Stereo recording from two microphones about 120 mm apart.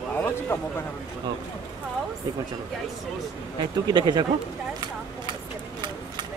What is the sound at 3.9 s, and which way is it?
Speech, 35° right (ahead or behind).